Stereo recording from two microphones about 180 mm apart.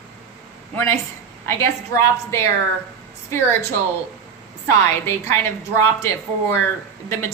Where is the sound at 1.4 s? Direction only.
15° left (ahead or behind).